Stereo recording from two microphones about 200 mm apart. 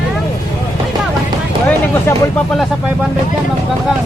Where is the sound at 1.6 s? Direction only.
10° left (ahead or behind).